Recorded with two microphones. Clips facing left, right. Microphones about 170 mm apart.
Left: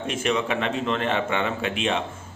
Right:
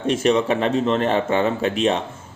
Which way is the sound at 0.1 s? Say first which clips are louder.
Right 7 dB; 35° right (ahead or behind).